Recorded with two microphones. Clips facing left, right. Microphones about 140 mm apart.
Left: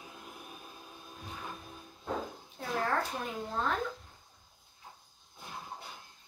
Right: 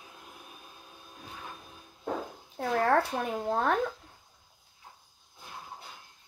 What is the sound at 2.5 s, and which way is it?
A woman's voice, 70° right (ahead or behind).